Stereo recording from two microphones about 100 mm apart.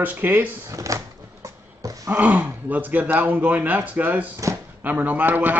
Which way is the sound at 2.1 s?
15° right (ahead or behind).